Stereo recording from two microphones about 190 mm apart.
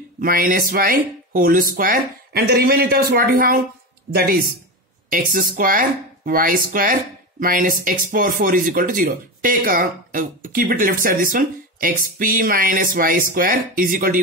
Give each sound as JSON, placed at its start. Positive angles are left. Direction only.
{"t": 0.2, "sound": "speech", "side_deg": -50}
{"t": 5.1, "sound": "speech", "side_deg": -50}